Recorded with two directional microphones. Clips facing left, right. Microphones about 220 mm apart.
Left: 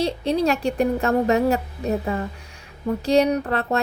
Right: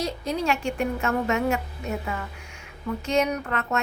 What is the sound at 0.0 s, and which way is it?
A woman's voice, 30° left (ahead or behind).